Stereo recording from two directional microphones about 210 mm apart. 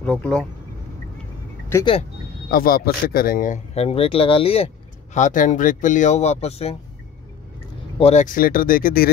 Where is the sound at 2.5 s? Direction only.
45° left (ahead or behind).